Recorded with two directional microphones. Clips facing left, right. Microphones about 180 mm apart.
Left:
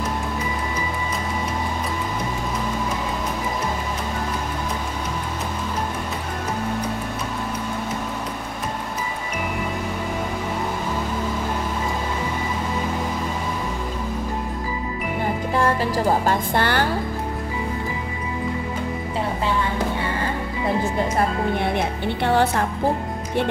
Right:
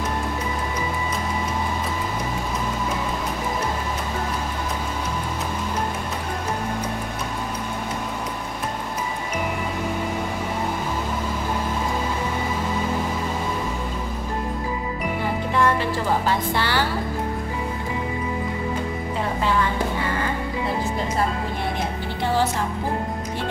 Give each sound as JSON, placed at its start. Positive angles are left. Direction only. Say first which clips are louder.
{"t": 15.5, "sound": "music", "louder": "even", "side_deg": 40}
{"t": 22.0, "sound": "music", "louder": "left 3 dB", "side_deg": 60}